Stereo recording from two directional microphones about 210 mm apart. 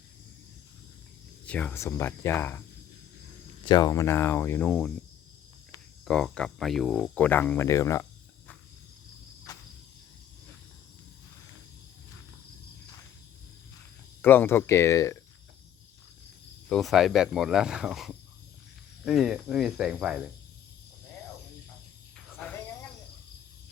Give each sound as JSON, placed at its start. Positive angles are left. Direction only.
{"t": 1.5, "sound": "speech", "side_deg": 5}
{"t": 3.6, "sound": "speech", "side_deg": 20}
{"t": 6.1, "sound": "speech", "side_deg": 5}
{"t": 9.5, "sound": "cricket", "side_deg": 15}
{"t": 14.2, "sound": "speech", "side_deg": 10}
{"t": 16.6, "sound": "speech", "side_deg": 0}
{"t": 22.4, "sound": "cricket", "side_deg": 5}